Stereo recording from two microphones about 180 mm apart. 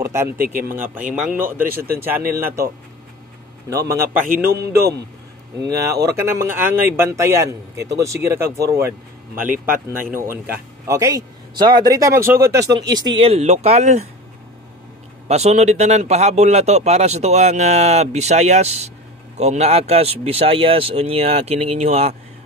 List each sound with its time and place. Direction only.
0.0 s speech: 15° right (ahead or behind)
0.8 s a man's voice: 50° right (ahead or behind)
1.1 s speech: 5° right (ahead or behind)
1.7 s a man's voice: 55° right (ahead or behind)
2.0 s speech: 10° right (ahead or behind)
4.0 s a man's voice: 50° right (ahead or behind)
4.6 s a man's voice: 60° right (ahead or behind)
5.6 s a man's voice: 15° right (ahead or behind); by 14.0 s 40° right (ahead or behind)
15.2 s speech: 40° right (ahead or behind)